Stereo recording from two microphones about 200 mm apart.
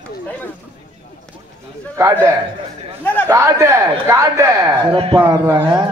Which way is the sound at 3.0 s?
10° left (ahead or behind).